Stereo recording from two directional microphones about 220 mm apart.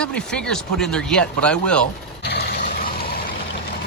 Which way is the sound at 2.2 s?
45° left (ahead or behind).